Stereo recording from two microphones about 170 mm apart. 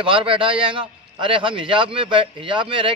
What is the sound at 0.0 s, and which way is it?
A man's voice, 30° right (ahead or behind).